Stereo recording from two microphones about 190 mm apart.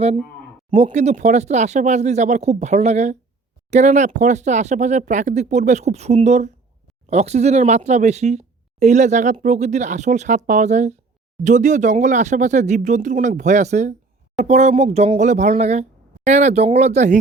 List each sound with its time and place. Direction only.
0.7 s speech: 30° right (ahead or behind)